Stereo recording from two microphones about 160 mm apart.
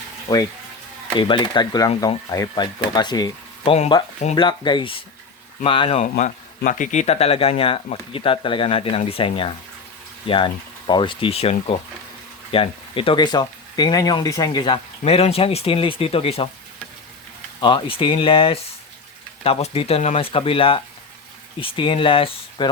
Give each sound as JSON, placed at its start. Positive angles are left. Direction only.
{"t": 0.3, "sound": "speech", "side_deg": 20}
{"t": 1.1, "sound": "speech", "side_deg": 30}
{"t": 6.0, "sound": "speech", "side_deg": 50}
{"t": 17.6, "sound": "speech", "side_deg": 30}